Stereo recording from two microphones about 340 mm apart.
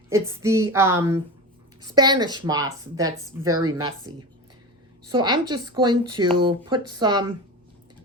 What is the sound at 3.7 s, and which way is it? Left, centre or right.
Speech, centre.